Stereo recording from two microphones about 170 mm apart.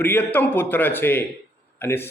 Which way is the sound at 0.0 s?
10° left (ahead or behind).